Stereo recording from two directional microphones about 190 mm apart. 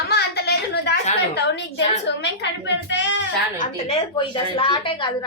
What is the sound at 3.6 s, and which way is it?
A woman's voice, 30° left (ahead or behind).